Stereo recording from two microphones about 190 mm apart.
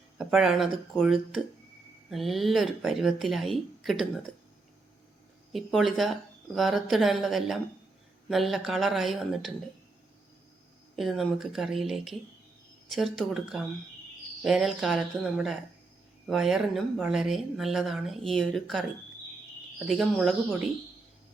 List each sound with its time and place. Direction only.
0.2 s speech: centre (ahead or behind)
5.5 s speech: centre (ahead or behind)
10.9 s speech: centre (ahead or behind)